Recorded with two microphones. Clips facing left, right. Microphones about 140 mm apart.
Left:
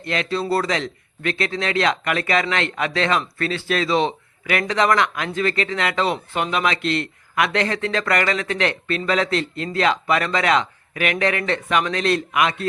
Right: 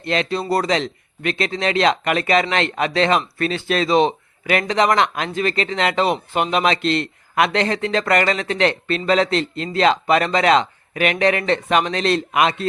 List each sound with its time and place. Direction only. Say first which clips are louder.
0.0 s speech: right 2 dB; 25° right (ahead or behind)